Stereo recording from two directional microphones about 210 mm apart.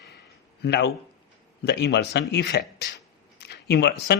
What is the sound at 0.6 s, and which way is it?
A man's voice, 55° left (ahead or behind).